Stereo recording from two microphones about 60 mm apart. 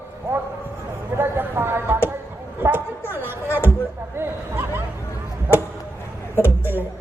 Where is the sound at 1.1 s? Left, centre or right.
Right.